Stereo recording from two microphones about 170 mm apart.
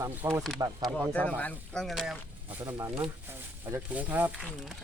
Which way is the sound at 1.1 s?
10° left (ahead or behind).